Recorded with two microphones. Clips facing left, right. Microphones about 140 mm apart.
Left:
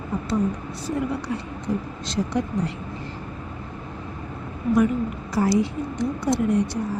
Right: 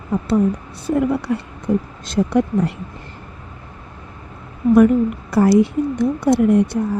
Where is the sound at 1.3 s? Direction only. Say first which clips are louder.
Right 7 dB; 60° right (ahead or behind).